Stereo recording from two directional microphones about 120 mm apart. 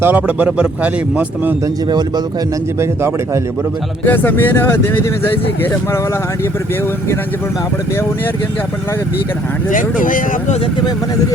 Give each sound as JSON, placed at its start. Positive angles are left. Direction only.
{"t": 0.0, "sound": "speech", "side_deg": -15}
{"t": 1.9, "sound": "speech", "side_deg": -35}
{"t": 4.0, "sound": "speech", "side_deg": 15}
{"t": 9.6, "sound": "speech", "side_deg": 90}